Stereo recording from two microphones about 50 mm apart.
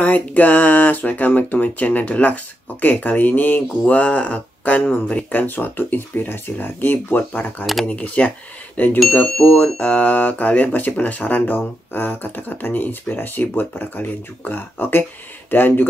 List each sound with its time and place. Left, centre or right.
0.0 s speech: left
7.8 s speech: left